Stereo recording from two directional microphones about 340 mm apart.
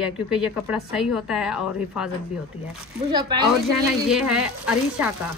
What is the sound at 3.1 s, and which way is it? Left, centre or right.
Speech, centre.